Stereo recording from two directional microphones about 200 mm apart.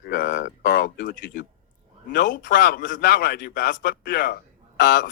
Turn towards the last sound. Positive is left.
turn(degrees=45)  # may be behind; listen again after turning